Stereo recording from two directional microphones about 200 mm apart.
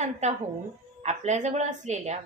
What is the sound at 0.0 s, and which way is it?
A woman's voice, 35° right (ahead or behind).